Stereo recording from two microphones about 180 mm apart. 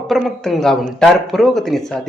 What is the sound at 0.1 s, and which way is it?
Speech, centre (ahead or behind).